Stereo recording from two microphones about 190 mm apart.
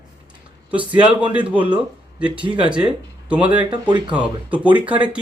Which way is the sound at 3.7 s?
25° right (ahead or behind).